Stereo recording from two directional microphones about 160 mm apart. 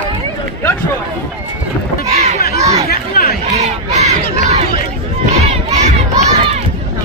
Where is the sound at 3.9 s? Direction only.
45° right (ahead or behind).